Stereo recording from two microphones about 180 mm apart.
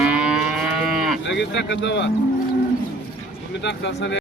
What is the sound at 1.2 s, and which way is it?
Speech, 75° left (ahead or behind).